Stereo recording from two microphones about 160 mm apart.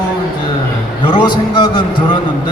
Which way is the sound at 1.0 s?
30° left (ahead or behind).